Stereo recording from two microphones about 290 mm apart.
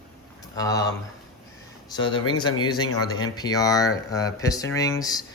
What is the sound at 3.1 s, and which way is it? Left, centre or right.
Speech, centre.